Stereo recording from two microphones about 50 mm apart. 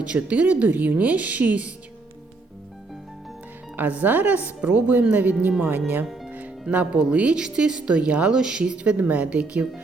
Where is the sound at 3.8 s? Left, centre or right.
Right.